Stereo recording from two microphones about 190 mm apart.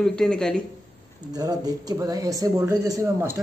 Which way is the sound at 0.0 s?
5° left (ahead or behind).